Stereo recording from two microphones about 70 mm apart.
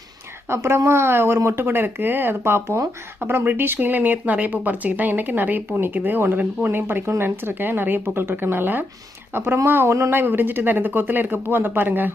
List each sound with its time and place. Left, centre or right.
0.4 s speech: right